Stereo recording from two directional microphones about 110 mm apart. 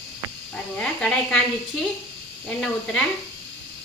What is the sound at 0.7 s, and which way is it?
Speech, 10° left (ahead or behind).